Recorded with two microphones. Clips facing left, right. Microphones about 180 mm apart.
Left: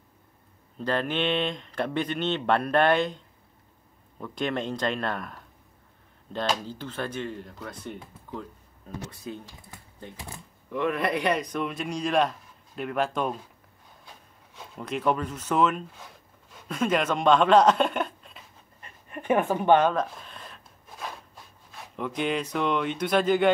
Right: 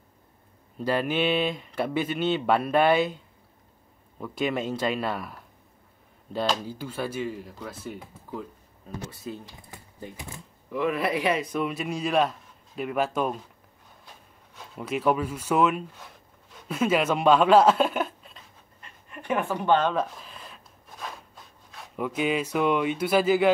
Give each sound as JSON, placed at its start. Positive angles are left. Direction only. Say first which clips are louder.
{"t": 0.7, "sound": "speech", "louder": "right 2 dB", "side_deg": -5}
{"t": 4.2, "sound": "speech", "louder": "right 2 dB", "side_deg": -5}
{"t": 14.6, "sound": "speech", "louder": "right 2 dB", "side_deg": -5}
{"t": 19.5, "sound": "speech", "louder": "left 2 dB", "side_deg": 15}
{"t": 19.9, "sound": "a sound", "louder": "even", "side_deg": -5}
{"t": 21.7, "sound": "speech", "louder": "right 2 dB", "side_deg": -5}